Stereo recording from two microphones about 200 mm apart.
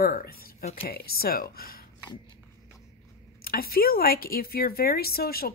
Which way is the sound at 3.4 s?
50° left (ahead or behind).